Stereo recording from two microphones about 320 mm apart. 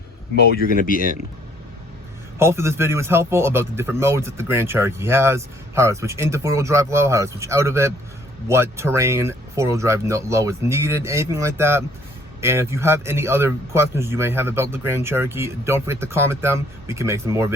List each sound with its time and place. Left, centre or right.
0.9 s speech: left
2.4 s a man's voice: centre